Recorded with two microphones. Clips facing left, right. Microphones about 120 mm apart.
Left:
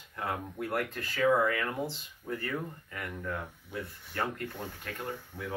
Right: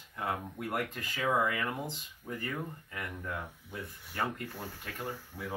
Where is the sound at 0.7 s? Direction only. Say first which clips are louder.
Left 1 dB; 15° right (ahead or behind).